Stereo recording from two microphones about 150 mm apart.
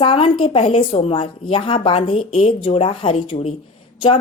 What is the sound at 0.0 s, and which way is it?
Speech, 35° left (ahead or behind).